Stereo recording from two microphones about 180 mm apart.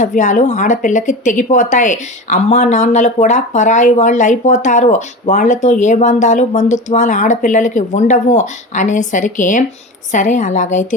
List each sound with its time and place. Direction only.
0.0 s speech: 45° left (ahead or behind)